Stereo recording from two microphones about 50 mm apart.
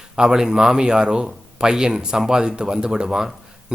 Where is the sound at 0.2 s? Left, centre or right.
Centre.